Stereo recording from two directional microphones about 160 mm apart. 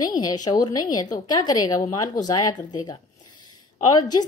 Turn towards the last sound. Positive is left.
turn(degrees=25)  # may be behind; listen again after turning